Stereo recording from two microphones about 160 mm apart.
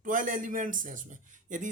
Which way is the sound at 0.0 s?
55° right (ahead or behind).